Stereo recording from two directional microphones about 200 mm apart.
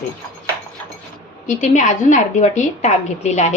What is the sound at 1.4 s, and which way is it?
A woman's voice, 35° left (ahead or behind).